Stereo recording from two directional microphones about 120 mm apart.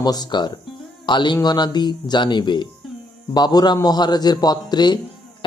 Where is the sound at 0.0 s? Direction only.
35° left (ahead or behind).